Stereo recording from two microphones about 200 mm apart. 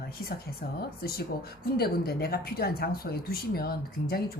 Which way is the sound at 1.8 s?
50° left (ahead or behind).